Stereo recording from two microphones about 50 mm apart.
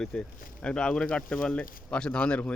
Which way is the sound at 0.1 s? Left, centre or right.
Centre.